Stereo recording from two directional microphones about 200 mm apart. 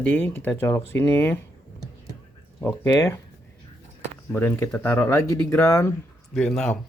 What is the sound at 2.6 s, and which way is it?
Speech, 15° left (ahead or behind).